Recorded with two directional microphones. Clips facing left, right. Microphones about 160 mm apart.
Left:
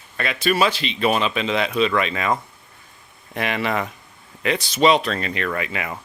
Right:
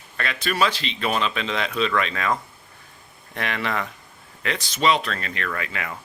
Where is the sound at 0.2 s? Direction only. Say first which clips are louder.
Left 4 dB; 10° left (ahead or behind).